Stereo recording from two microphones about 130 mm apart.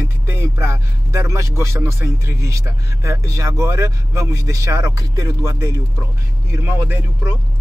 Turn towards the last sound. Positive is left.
turn(degrees=-15)  # may be behind; listen again after turning